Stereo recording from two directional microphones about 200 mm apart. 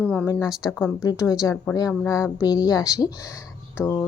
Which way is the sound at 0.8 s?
15° left (ahead or behind).